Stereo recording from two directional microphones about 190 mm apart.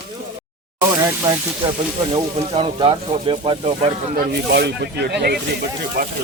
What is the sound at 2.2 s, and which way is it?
Speech, 25° right (ahead or behind).